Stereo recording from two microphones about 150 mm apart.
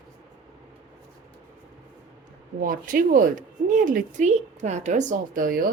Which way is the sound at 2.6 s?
70° right (ahead or behind).